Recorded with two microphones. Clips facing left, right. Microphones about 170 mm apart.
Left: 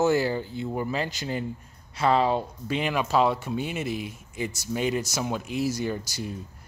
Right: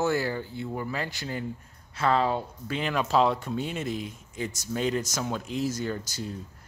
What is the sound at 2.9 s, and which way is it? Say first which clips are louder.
Speech: even; 5° left (ahead or behind).